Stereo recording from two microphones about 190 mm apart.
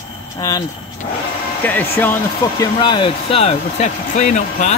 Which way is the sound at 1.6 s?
10° left (ahead or behind).